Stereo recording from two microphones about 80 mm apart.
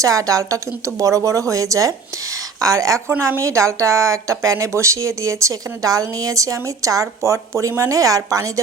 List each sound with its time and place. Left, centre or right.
0.0 s a woman's voice: right